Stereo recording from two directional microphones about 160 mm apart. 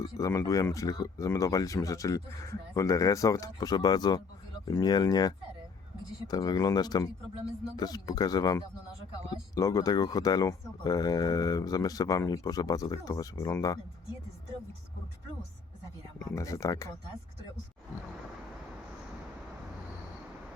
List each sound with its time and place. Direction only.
0.2 s speech: 20° left (ahead or behind)
16.3 s speech: 20° left (ahead or behind)